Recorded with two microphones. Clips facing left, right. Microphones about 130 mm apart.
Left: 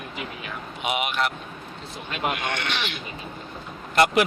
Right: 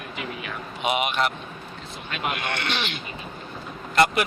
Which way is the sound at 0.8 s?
5° left (ahead or behind).